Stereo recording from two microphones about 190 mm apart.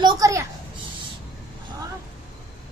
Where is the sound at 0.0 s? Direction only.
15° right (ahead or behind).